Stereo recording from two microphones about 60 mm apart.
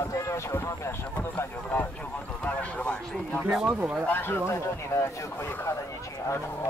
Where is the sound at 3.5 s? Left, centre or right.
Centre.